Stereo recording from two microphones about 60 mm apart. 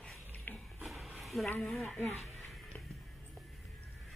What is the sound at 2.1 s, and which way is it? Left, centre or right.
Music, centre.